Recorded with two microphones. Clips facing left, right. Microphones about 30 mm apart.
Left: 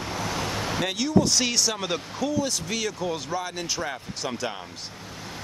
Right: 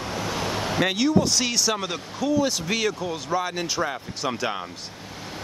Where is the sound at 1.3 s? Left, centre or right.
Centre.